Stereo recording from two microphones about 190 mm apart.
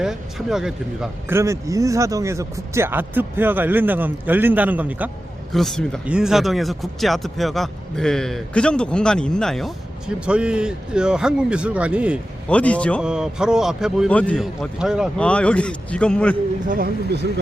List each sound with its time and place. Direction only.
0.0 s speech: centre (ahead or behind)
1.3 s speech: 15° right (ahead or behind)
5.5 s speech: centre (ahead or behind)
12.5 s speech: 5° left (ahead or behind)
13.0 s speech: 5° right (ahead or behind)
16.6 s speech: 50° right (ahead or behind)